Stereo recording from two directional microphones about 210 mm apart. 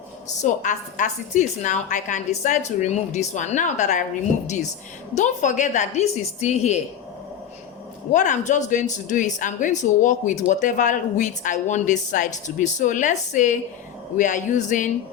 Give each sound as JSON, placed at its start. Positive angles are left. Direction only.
{"t": 0.4, "sound": "speech", "side_deg": 35}
{"t": 8.1, "sound": "speech", "side_deg": 35}